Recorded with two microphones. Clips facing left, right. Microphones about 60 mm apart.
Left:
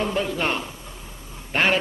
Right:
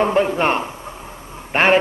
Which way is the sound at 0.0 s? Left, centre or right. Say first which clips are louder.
Right 8 dB; right.